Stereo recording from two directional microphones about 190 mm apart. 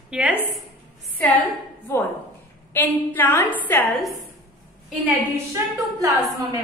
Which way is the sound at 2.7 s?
10° left (ahead or behind).